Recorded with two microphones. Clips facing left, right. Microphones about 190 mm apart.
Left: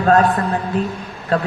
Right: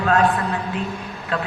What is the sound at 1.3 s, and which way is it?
Speech, 40° left (ahead or behind).